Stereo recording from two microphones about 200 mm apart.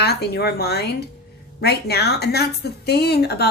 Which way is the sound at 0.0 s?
55° left (ahead or behind).